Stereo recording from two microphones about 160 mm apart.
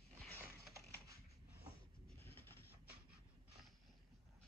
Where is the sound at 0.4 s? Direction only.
20° right (ahead or behind).